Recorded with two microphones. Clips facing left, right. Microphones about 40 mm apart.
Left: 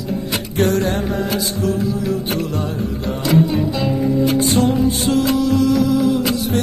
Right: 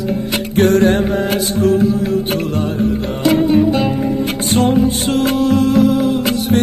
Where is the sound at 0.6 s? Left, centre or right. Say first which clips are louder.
Right 6 dB; right.